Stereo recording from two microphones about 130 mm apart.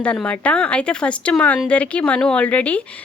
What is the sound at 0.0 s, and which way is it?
A woman's voice, 10° left (ahead or behind).